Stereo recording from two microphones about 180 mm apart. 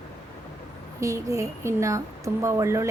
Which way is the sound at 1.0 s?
15° right (ahead or behind).